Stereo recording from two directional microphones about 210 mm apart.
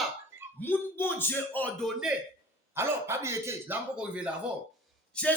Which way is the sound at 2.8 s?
10° right (ahead or behind).